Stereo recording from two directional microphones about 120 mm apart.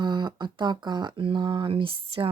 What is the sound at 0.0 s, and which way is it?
Speech, 40° right (ahead or behind).